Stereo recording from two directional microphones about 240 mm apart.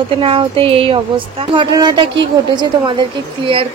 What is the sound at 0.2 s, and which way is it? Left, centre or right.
A woman's voice, right.